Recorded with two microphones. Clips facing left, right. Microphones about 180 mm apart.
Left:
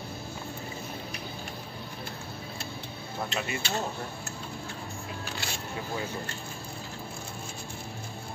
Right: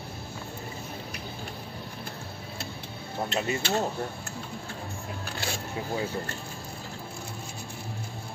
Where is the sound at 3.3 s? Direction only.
40° right (ahead or behind).